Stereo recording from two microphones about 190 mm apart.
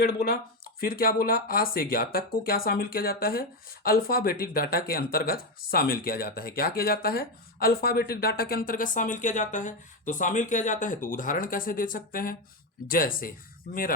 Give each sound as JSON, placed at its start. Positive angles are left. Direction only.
{"t": 0.0, "sound": "speech", "side_deg": 60}